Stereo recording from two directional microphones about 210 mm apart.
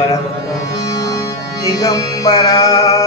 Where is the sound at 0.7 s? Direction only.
15° left (ahead or behind).